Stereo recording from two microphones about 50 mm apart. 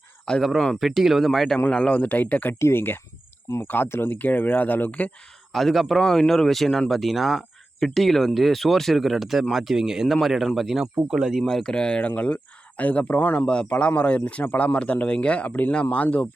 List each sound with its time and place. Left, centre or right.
0.4 s speech: centre
1.7 s speech: centre
2.0 s speech: left
2.6 s speech: left
5.5 s speech: centre
11.4 s speech: centre; by 16.2 s left